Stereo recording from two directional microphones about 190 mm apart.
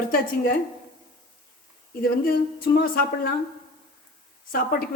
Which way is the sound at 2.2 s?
50° left (ahead or behind).